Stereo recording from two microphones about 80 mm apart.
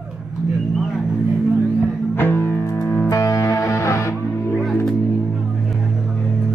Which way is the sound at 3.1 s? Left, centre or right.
Left.